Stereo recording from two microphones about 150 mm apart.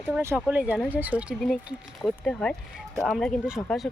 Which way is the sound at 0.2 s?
10° right (ahead or behind).